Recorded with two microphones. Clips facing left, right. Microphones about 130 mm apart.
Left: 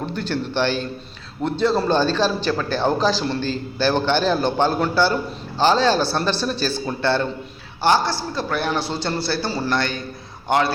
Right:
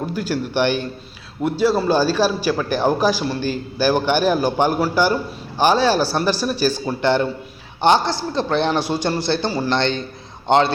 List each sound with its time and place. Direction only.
0.0 s a man's voice: 5° right (ahead or behind); by 10.6 s 25° right (ahead or behind)